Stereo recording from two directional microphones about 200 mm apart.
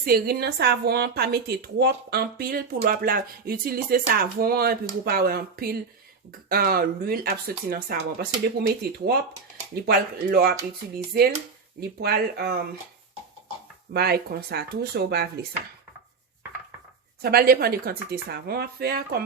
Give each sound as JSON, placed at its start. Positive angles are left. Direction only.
{"t": 0.0, "sound": "a woman's voice", "side_deg": -50}
{"t": 13.9, "sound": "a woman's voice", "side_deg": -50}
{"t": 17.2, "sound": "a woman's voice", "side_deg": -50}